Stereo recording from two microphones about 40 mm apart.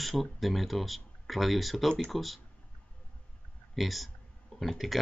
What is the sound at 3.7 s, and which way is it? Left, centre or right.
Speech, centre.